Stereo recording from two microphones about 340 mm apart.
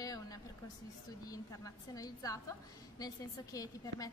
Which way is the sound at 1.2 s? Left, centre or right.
Centre.